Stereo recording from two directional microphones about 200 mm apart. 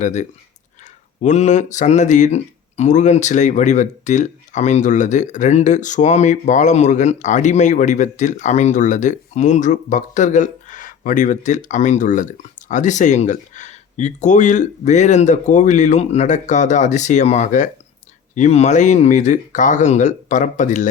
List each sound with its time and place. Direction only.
0.0 s speech: 35° left (ahead or behind)